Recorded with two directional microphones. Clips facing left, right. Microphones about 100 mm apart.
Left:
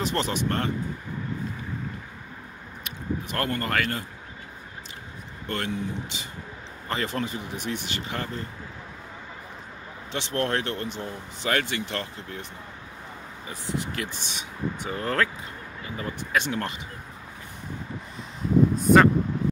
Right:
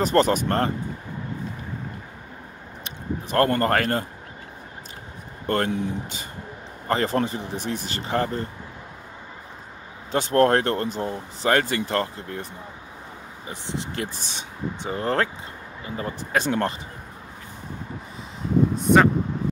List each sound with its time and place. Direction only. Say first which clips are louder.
0.0 s speech: right 7 dB; 45° right (ahead or behind)
2.8 s speech: even; 40° right (ahead or behind)
5.5 s speech: right 6 dB; 45° right (ahead or behind)
10.1 s speech: right 9 dB; 40° right (ahead or behind)
13.5 s speech: even; 30° right (ahead or behind)
18.8 s speech: even; centre (ahead or behind)